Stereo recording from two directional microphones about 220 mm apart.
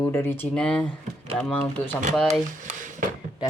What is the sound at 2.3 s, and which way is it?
Speech, 35° right (ahead or behind).